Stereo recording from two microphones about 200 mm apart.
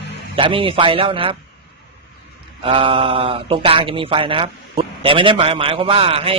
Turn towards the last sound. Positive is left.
turn(degrees=-30)  # may be behind; listen again after turning